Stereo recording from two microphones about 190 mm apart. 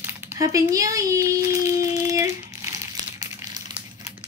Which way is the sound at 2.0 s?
15° right (ahead or behind).